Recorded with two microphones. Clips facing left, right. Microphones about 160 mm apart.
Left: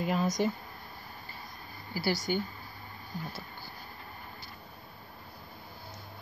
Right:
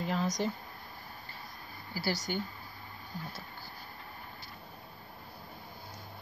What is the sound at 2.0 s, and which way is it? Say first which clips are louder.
Speech: left 4 dB; 15° left (ahead or behind).